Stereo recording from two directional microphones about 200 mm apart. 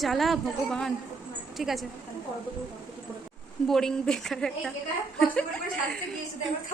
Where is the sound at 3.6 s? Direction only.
Centre (ahead or behind).